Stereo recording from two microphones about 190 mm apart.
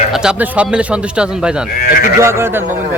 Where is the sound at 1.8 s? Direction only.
50° left (ahead or behind).